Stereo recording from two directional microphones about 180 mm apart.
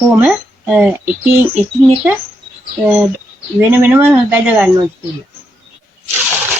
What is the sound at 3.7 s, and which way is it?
Speech, 10° right (ahead or behind).